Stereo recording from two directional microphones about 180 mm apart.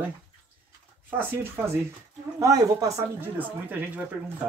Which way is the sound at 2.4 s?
20° right (ahead or behind).